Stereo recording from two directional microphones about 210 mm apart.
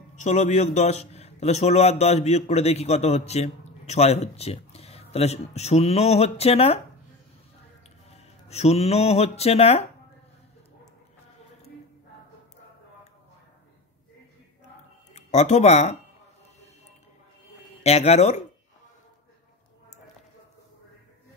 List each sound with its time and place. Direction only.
0.1 s a man's voice: 35° left (ahead or behind)
8.1 s speech: 30° left (ahead or behind)
15.1 s speech: 35° left (ahead or behind)
17.8 s a man's voice: 30° left (ahead or behind)